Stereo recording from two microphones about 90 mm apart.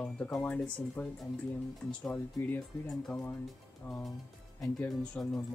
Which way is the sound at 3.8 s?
20° left (ahead or behind).